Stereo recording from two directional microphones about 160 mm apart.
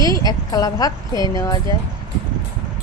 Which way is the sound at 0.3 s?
25° left (ahead or behind).